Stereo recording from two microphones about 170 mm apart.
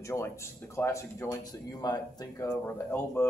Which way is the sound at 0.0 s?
15° left (ahead or behind).